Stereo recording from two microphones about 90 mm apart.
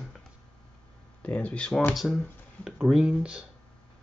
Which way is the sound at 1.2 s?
15° left (ahead or behind).